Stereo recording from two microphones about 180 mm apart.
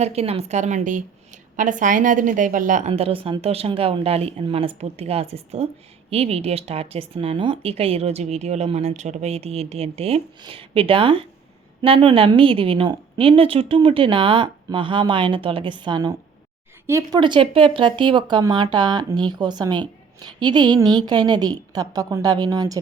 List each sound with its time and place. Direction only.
0.0 s a woman's voice: 35° right (ahead or behind)